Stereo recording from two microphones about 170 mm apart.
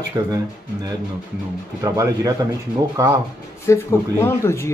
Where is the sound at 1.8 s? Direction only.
20° right (ahead or behind).